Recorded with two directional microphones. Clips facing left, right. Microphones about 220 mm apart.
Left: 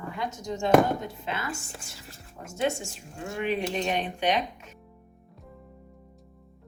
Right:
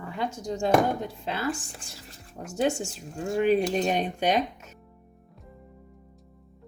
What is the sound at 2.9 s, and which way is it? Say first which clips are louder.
Speech: right 7 dB; 40° right (ahead or behind).